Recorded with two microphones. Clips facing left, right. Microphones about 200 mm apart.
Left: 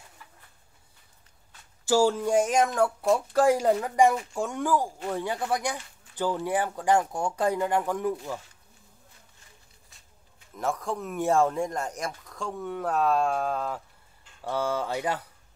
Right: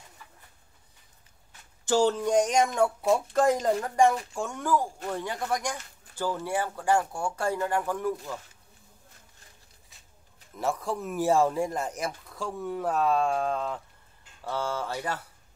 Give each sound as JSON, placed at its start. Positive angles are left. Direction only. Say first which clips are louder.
{"t": 1.9, "sound": "speech", "louder": "left 1 dB", "side_deg": 10}
{"t": 10.6, "sound": "speech", "louder": "even", "side_deg": 0}
{"t": 14.4, "sound": "speech", "louder": "left 3 dB", "side_deg": 15}